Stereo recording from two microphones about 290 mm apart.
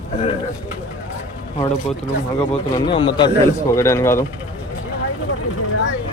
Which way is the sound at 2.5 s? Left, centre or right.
Centre.